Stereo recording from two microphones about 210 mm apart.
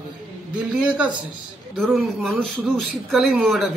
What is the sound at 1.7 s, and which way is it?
Speech, centre (ahead or behind).